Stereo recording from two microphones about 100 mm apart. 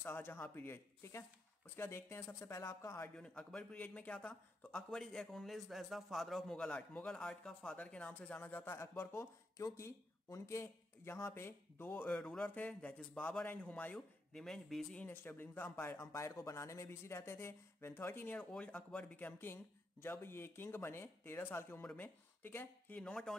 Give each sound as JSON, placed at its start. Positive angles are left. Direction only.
{"t": 0.0, "sound": "speech", "side_deg": 20}
{"t": 3.2, "sound": "a man's voice", "side_deg": 10}
{"t": 14.4, "sound": "speech", "side_deg": 5}
{"t": 15.0, "sound": "speech", "side_deg": 20}
{"t": 22.9, "sound": "a man's voice", "side_deg": 10}